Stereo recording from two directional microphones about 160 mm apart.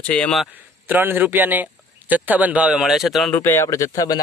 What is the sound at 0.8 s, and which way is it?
Speech, 10° right (ahead or behind).